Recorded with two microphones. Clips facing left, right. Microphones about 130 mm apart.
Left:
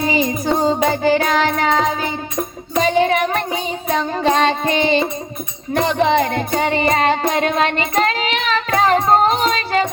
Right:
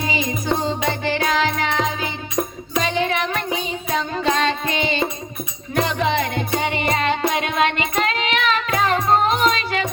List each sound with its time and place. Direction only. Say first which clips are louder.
0.0 s music: left 6 dB; 40° left (ahead or behind)
2.7 s music: left 6 dB; 40° left (ahead or behind)